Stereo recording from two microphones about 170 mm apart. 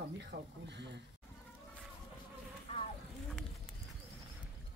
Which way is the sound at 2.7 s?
35° left (ahead or behind).